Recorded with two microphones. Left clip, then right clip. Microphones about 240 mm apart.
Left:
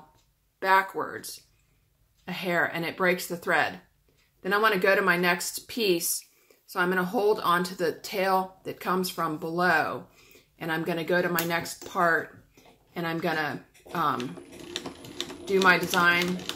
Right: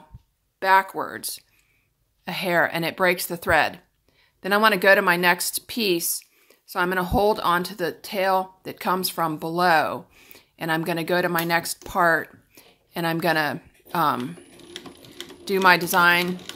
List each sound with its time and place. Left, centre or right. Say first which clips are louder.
0.6 s a woman's voice: right 4 dB; right
15.4 s speech: right 4 dB; right